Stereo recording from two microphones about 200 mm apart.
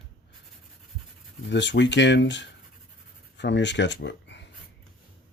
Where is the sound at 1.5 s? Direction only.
60° left (ahead or behind).